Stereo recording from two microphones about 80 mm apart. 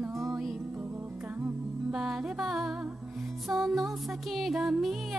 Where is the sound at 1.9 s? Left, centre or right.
Centre.